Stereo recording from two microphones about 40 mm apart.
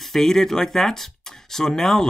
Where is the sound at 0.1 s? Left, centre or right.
Centre.